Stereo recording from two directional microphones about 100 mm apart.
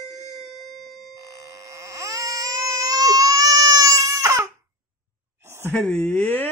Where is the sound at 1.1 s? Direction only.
35° right (ahead or behind).